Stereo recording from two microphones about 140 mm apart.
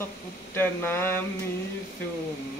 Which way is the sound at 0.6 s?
15° left (ahead or behind).